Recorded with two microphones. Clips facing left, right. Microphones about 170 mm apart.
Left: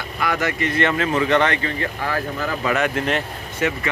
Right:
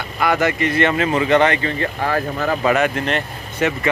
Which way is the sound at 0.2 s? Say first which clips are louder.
Right 5 dB; 90° right.